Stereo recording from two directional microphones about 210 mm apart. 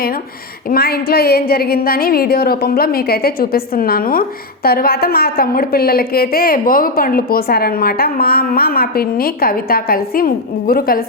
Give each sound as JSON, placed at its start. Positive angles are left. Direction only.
{"t": 0.7, "sound": "a woman's voice", "side_deg": 45}